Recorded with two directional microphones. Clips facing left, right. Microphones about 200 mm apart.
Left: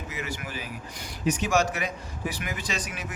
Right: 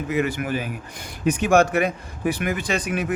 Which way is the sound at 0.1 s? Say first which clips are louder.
Right 13 dB; 55° right (ahead or behind).